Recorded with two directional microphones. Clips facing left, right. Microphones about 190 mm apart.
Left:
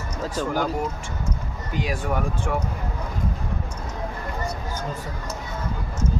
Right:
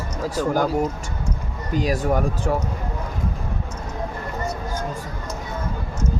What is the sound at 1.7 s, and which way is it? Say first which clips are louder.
Speech: right 5 dB; 40° right (ahead or behind).